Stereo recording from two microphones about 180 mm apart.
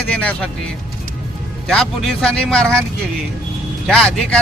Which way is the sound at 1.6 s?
Centre (ahead or behind).